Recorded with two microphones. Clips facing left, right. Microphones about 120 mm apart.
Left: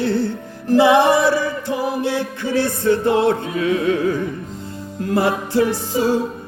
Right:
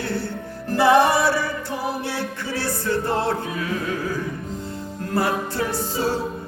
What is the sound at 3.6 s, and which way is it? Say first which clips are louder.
Music: left 11 dB; 65° left (ahead or behind).